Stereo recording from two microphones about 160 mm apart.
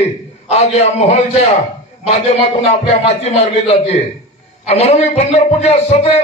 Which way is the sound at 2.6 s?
40° left (ahead or behind).